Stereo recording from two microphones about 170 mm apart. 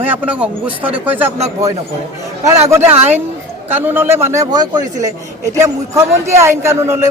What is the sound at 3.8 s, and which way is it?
A man's voice, 10° right (ahead or behind).